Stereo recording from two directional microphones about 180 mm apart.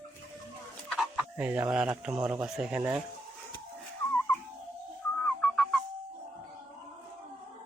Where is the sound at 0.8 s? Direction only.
Centre (ahead or behind).